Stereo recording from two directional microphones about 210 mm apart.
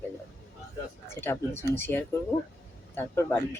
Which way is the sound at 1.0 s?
10° left (ahead or behind).